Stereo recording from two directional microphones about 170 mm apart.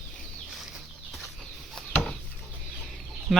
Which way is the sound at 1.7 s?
5° left (ahead or behind).